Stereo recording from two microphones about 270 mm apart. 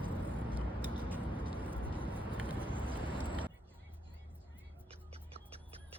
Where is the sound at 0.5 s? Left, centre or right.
Centre.